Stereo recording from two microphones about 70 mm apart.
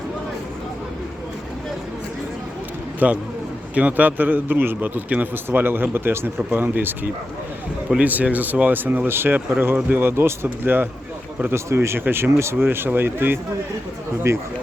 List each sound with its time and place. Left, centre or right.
3.0 s a man's voice: right
14.3 s speech: right